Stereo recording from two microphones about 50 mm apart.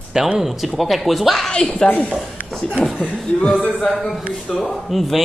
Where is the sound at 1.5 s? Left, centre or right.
Centre.